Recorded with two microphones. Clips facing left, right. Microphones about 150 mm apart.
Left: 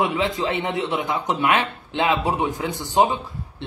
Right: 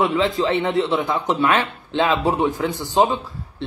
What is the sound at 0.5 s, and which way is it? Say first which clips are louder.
A man's voice: right 5 dB; 20° left (ahead or behind).